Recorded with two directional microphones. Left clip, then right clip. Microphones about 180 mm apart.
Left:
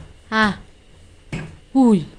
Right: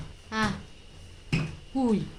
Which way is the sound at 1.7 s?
45° left (ahead or behind).